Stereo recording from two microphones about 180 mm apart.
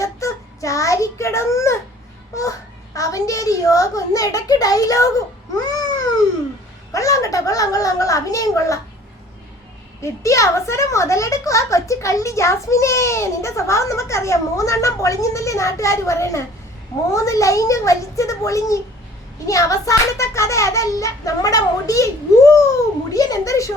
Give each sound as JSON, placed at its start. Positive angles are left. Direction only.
{"t": 0.0, "sound": "a child's voice", "side_deg": 15}
{"t": 10.0, "sound": "a woman's voice", "side_deg": 15}